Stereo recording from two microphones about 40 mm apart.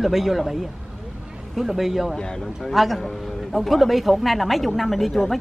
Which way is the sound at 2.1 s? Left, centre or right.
Centre.